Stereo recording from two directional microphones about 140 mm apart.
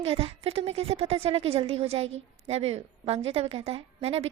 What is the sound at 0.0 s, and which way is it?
A woman's voice, 45° right (ahead or behind).